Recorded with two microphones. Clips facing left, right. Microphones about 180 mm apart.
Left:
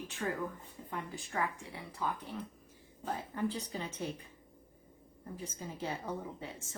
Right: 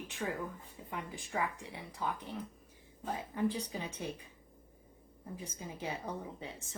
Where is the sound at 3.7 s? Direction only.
15° right (ahead or behind).